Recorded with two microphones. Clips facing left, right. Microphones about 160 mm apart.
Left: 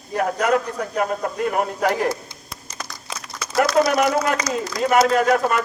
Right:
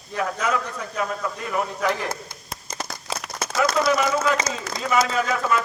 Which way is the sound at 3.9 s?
60° left (ahead or behind).